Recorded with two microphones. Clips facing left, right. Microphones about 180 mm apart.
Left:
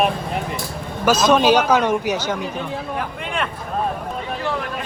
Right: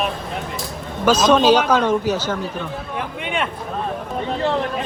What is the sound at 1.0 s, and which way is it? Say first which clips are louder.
Speech: right 1 dB; 10° left (ahead or behind).